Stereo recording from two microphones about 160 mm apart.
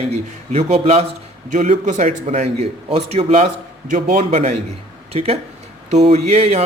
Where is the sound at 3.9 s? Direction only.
55° right (ahead or behind).